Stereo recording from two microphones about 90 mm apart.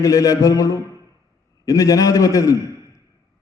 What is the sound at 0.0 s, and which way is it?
A man's voice, 35° left (ahead or behind).